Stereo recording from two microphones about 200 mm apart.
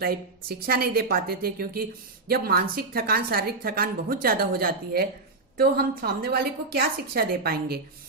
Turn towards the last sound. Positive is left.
turn(degrees=-50)  # may be behind; listen again after turning